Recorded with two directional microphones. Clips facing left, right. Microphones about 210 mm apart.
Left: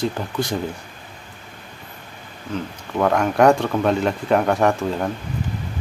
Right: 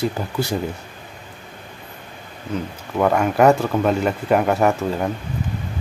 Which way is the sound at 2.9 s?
5° right (ahead or behind).